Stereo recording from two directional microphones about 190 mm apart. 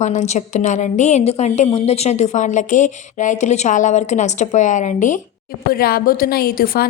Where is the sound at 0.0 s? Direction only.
40° left (ahead or behind).